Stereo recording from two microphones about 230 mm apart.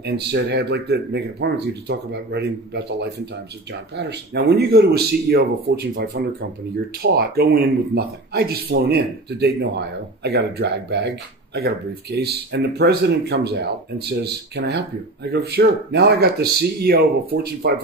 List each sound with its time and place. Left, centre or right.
0.0 s speech: right